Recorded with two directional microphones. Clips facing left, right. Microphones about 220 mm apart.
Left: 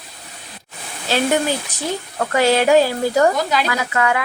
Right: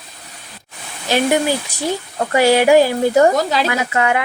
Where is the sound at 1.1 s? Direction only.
15° right (ahead or behind).